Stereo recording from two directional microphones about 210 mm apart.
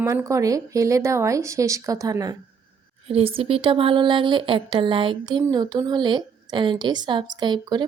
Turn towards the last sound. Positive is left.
turn(degrees=-20)  # may be behind; listen again after turning